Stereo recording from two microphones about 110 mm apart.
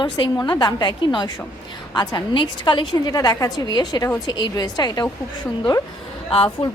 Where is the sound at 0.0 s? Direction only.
45° left (ahead or behind).